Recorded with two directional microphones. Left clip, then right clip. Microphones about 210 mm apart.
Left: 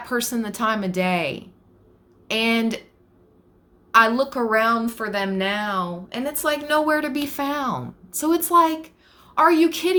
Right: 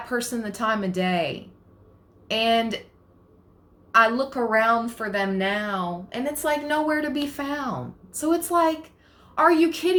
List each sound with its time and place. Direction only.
0.1 s a woman's voice: 35° left (ahead or behind)
3.9 s a woman's voice: 35° left (ahead or behind)